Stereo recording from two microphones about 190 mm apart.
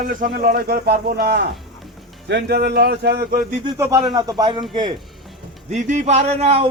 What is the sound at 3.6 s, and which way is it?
A man's voice, 15° right (ahead or behind).